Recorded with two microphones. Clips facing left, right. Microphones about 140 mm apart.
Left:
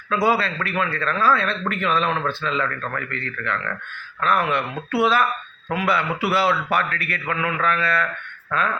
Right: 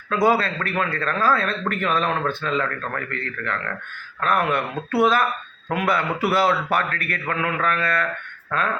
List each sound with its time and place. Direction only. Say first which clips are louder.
0.1 s speech: right 1 dB; 45° right (ahead or behind)